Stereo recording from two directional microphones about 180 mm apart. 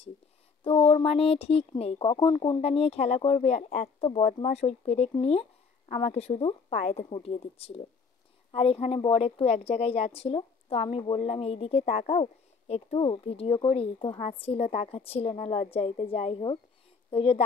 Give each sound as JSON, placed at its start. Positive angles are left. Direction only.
{"t": 0.7, "sound": "a woman's voice", "side_deg": 30}
{"t": 2.6, "sound": "a woman's voice", "side_deg": 35}